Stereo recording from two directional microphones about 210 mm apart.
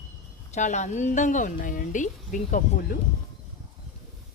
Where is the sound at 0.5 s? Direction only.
35° left (ahead or behind).